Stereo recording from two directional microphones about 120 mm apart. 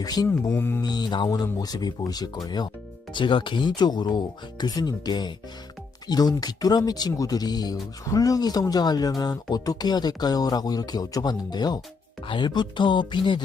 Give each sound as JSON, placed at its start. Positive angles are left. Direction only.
{"t": 0.0, "sound": "speech", "side_deg": 35}
{"t": 0.4, "sound": "music", "side_deg": 20}
{"t": 0.8, "sound": "speech", "side_deg": 35}